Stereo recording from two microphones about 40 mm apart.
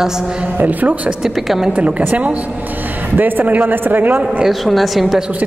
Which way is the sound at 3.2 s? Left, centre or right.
Right.